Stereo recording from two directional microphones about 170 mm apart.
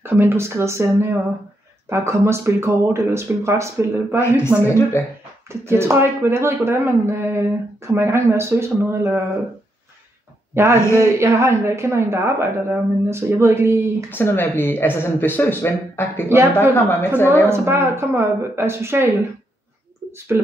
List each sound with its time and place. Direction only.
0.0 s speech: 15° right (ahead or behind)
4.6 s speech: 15° left (ahead or behind)
5.7 s speech: 15° right (ahead or behind)
10.5 s a man's voice: 15° right (ahead or behind)
14.1 s speech: 10° left (ahead or behind)
17.3 s speech: 15° right (ahead or behind)